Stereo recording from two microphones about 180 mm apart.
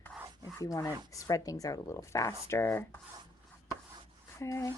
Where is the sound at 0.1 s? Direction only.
Centre (ahead or behind).